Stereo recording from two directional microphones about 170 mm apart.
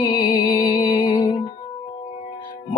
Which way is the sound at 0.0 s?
30° left (ahead or behind).